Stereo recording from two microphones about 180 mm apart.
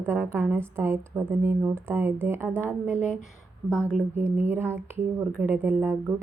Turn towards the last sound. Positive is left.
turn(degrees=-10)  # may be behind; listen again after turning